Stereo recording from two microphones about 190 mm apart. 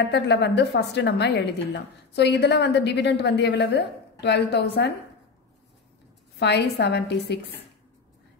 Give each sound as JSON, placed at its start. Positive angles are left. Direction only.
{"t": 0.1, "sound": "a woman's voice", "side_deg": 65}
{"t": 6.4, "sound": "a woman's voice", "side_deg": 65}